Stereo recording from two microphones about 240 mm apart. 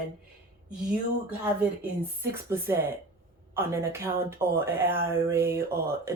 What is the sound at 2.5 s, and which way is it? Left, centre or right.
Speech, centre.